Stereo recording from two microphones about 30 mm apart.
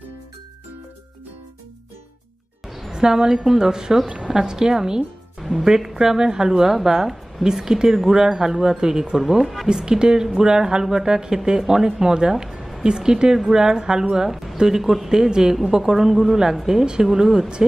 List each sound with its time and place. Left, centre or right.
2.9 s speech: right
5.4 s music: centre
5.9 s speech: right
9.1 s speech: centre
9.7 s speech: right; by 15.0 s centre
15.0 s speech: right
15.8 s speech: centre
16.8 s speech: right